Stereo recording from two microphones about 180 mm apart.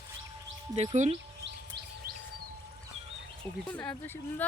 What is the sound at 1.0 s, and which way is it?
Speech, 40° right (ahead or behind).